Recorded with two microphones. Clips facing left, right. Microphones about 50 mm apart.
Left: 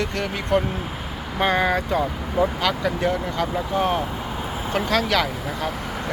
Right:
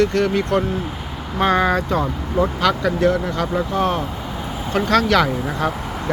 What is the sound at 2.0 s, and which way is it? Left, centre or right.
Speech, centre.